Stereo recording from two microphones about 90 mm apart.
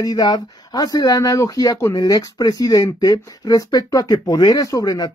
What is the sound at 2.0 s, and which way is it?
Speech, 45° left (ahead or behind).